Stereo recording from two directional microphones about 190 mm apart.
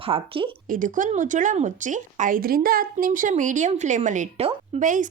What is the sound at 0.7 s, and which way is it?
Speech, 45° right (ahead or behind).